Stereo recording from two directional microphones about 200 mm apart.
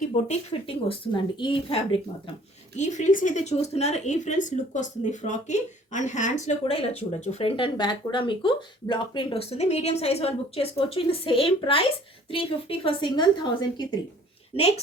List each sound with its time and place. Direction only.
0.0 s a woman's voice: 30° left (ahead or behind)